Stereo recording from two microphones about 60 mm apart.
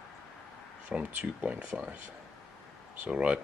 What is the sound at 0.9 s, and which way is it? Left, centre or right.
Speech, centre.